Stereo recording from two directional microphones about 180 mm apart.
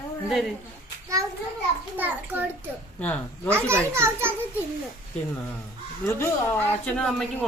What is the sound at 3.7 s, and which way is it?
Speech, 15° right (ahead or behind).